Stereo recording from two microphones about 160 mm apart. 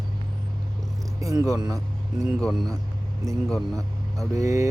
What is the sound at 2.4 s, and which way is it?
Speech, centre (ahead or behind).